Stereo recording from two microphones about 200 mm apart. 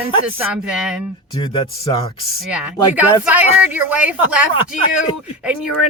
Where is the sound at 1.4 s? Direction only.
25° left (ahead or behind).